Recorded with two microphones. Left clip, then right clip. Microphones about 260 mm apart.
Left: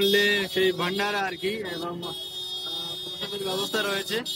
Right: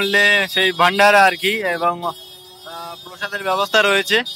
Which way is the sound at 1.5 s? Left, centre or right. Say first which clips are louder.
Right 12 dB; right.